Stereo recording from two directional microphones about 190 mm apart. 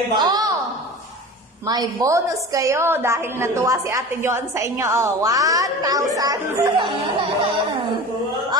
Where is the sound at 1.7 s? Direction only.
20° right (ahead or behind).